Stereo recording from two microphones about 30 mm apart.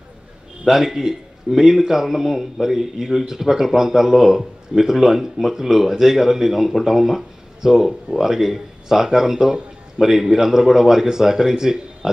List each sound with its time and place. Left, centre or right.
0.7 s speech: centre